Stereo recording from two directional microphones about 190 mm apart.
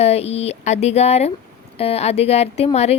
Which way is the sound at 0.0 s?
35° left (ahead or behind).